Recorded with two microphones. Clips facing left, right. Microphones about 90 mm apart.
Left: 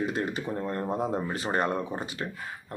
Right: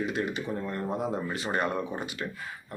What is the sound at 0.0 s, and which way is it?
Speech, 40° left (ahead or behind).